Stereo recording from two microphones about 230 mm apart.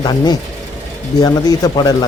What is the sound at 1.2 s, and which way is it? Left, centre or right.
Speech, centre.